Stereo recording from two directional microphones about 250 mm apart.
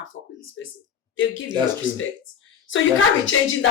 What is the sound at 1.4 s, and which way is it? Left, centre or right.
Speech, centre.